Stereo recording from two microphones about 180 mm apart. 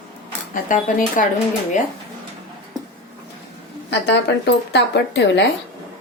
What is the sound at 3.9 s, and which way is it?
Speech, 70° left (ahead or behind).